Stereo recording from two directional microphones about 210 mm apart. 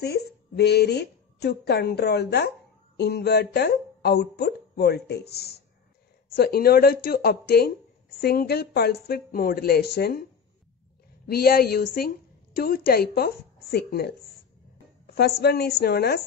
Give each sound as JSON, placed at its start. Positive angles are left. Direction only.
{"t": 0.0, "sound": "a woman's voice", "side_deg": 50}
{"t": 11.2, "sound": "speech", "side_deg": 45}
{"t": 15.1, "sound": "speech", "side_deg": 50}